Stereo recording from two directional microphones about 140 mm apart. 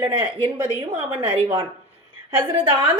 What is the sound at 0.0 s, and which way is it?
Speech, 35° right (ahead or behind).